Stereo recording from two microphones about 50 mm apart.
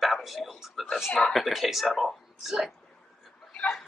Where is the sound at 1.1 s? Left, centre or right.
Centre.